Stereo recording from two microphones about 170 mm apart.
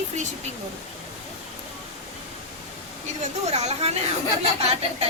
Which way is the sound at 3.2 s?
40° right (ahead or behind).